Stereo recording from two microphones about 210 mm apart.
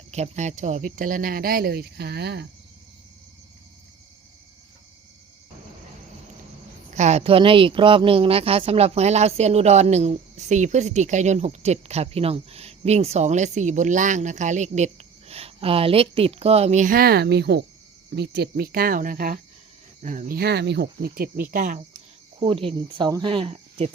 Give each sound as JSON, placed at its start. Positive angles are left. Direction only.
{"t": 0.1, "sound": "speech", "side_deg": -35}
{"t": 6.9, "sound": "a woman's voice", "side_deg": -30}
{"t": 22.4, "sound": "a woman's voice", "side_deg": -25}